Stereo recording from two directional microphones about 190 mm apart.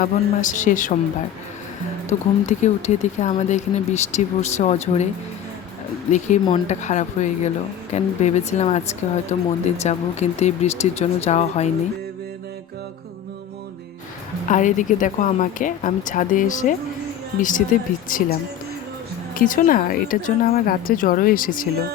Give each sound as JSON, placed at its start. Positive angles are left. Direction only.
{"t": 0.0, "sound": "speech", "side_deg": 40}
{"t": 2.0, "sound": "speech", "side_deg": 40}
{"t": 6.1, "sound": "speech", "side_deg": 40}
{"t": 14.4, "sound": "speech", "side_deg": 40}
{"t": 19.4, "sound": "speech", "side_deg": 45}